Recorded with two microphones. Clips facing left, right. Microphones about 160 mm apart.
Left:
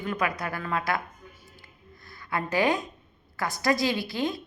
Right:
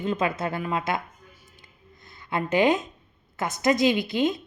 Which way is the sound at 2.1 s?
20° right (ahead or behind).